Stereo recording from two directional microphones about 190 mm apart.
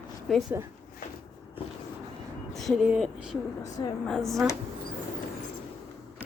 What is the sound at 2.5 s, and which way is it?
Speech, centre (ahead or behind).